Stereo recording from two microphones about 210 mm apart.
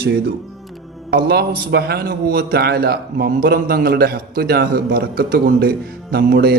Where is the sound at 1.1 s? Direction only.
50° right (ahead or behind).